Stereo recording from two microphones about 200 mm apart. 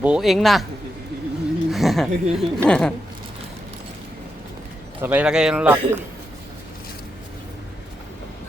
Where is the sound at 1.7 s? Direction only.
Centre (ahead or behind).